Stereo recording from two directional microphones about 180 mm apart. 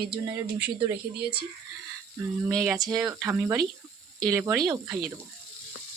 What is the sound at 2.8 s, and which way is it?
Speech, 20° right (ahead or behind).